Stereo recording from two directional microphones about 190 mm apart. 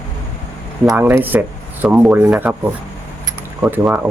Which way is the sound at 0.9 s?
10° right (ahead or behind).